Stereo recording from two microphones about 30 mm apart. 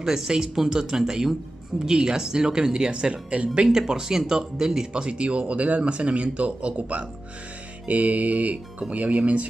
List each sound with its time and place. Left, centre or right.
0.0 s speech: right
3.6 s speech: right
4.9 s speech: right
7.9 s speech: right
9.1 s speech: right